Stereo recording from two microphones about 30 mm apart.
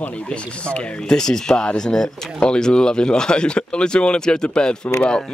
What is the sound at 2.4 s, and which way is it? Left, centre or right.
Speech, left.